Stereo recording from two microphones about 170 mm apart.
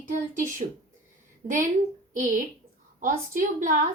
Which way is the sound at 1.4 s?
50° right (ahead or behind).